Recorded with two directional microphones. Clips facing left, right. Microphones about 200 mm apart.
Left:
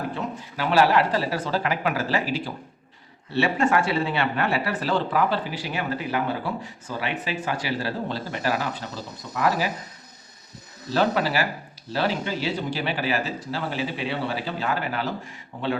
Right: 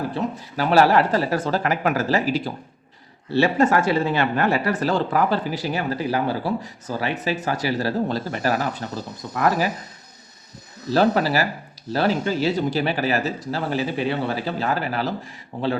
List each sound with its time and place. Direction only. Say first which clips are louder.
0.1 s speech: right 5 dB; 40° right (ahead or behind)
10.9 s speech: right 4 dB; 40° right (ahead or behind)